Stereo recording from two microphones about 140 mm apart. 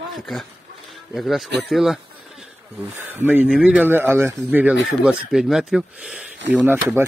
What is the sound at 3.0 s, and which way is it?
Speech, 15° right (ahead or behind).